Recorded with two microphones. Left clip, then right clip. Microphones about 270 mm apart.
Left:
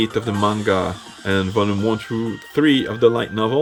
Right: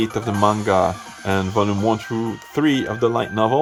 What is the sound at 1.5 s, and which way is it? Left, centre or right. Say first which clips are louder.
Speech: right 1 dB; centre.